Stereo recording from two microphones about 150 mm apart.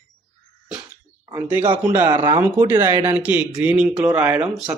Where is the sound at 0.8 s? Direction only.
15° right (ahead or behind).